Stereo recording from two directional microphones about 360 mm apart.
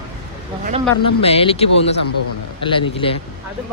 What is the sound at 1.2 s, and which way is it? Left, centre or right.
Speech, centre.